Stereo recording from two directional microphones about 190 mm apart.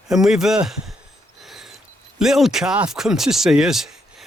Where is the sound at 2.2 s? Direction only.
Centre (ahead or behind).